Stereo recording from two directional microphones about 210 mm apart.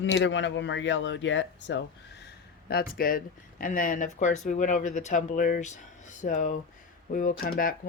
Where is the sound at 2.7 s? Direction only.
45° left (ahead or behind).